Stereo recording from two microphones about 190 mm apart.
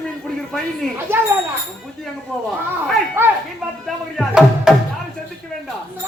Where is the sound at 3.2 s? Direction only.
10° right (ahead or behind).